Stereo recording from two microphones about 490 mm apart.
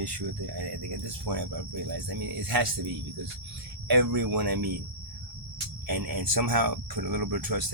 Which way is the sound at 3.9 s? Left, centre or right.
Right.